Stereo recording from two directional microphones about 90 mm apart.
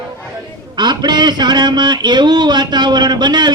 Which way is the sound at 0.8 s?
55° right (ahead or behind).